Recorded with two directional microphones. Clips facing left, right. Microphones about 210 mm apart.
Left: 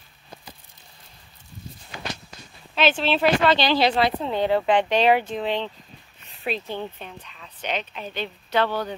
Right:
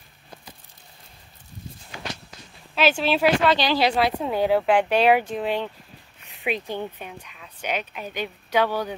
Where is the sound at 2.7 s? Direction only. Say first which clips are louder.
Even; 10° right (ahead or behind).